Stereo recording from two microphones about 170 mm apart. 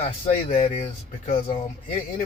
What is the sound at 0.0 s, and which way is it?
Speech, 35° left (ahead or behind).